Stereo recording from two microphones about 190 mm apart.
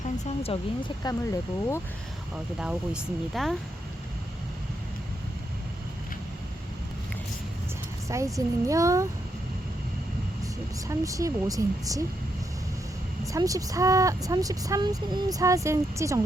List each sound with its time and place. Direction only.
1.0 s speech: 15° left (ahead or behind)
2.3 s speech: 5° right (ahead or behind)
8.0 s speech: 15° right (ahead or behind)
10.4 s speech: 15° right (ahead or behind)
13.2 s speech: 15° right (ahead or behind)